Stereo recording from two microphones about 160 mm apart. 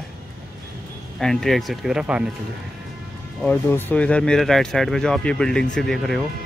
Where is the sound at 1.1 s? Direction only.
Centre (ahead or behind).